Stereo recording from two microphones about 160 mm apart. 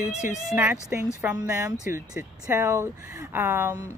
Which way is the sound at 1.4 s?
20° right (ahead or behind).